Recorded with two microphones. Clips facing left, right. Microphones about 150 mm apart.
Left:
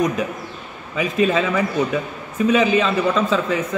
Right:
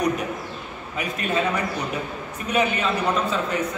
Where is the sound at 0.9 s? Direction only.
90° left.